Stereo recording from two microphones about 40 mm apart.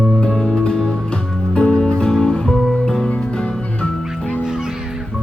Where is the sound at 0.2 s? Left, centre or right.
Centre; by 3.8 s left.